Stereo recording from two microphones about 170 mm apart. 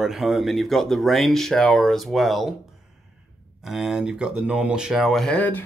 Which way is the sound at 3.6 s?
5° right (ahead or behind).